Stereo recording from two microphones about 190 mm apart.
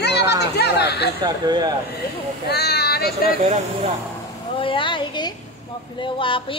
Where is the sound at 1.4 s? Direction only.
20° right (ahead or behind).